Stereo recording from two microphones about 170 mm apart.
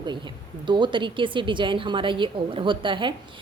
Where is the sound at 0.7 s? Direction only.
30° right (ahead or behind).